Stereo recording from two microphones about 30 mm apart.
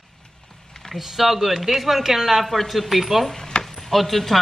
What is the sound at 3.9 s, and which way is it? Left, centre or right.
Speech, centre.